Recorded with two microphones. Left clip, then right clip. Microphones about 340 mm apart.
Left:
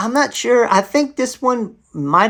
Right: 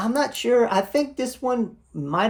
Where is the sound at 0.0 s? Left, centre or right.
Left.